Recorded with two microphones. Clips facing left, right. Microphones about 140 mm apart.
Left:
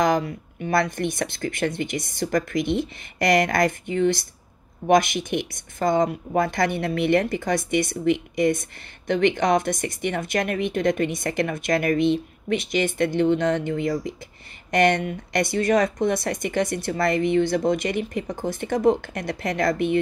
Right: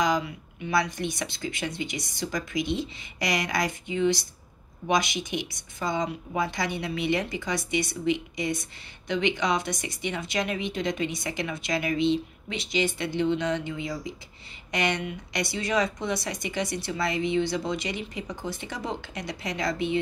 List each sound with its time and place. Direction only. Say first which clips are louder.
0.0 s a woman's voice: left 5 dB; 50° left (ahead or behind)